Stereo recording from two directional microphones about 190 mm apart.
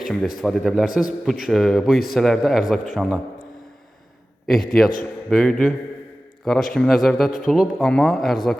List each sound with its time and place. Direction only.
0.0 s a man's voice: centre (ahead or behind)
4.4 s a man's voice: centre (ahead or behind)